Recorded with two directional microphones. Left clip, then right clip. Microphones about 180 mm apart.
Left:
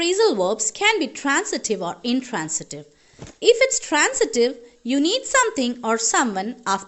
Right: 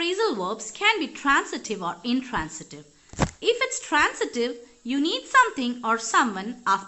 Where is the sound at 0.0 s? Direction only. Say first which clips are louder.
Left 6 dB; 40° left (ahead or behind).